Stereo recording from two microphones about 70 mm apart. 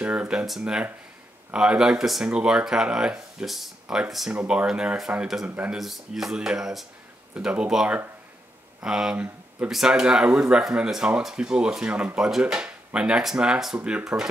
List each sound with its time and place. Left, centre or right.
0.0 s speech: centre
3.8 s speech: centre
7.3 s speech: centre